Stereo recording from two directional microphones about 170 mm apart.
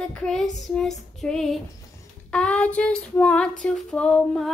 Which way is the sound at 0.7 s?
5° left (ahead or behind).